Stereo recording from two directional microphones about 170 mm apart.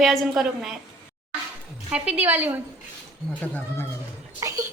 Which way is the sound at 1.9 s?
5° right (ahead or behind).